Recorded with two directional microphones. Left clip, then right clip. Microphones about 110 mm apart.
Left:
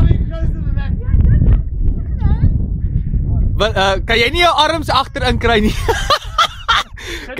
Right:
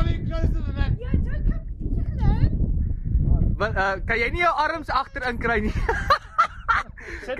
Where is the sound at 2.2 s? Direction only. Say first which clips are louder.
Left 4 dB; 50° right (ahead or behind).